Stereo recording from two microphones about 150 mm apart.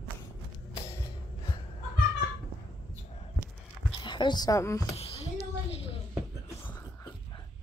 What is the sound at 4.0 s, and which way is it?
Speech, 30° left (ahead or behind).